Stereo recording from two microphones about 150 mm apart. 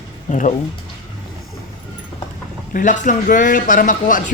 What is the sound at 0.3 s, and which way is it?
Speech, 55° left (ahead or behind).